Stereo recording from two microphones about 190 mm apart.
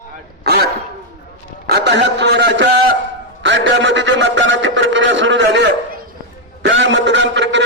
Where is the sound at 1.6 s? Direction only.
60° right (ahead or behind).